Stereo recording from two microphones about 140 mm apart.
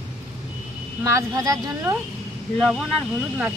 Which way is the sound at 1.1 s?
25° right (ahead or behind).